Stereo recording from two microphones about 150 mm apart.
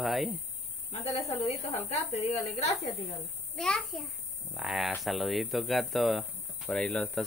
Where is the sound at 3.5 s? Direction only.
5° left (ahead or behind).